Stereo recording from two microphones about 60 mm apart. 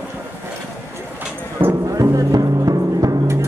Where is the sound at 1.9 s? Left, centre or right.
Right.